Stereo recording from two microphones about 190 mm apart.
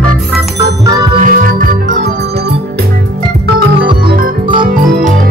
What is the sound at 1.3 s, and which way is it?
Music, 50° right (ahead or behind).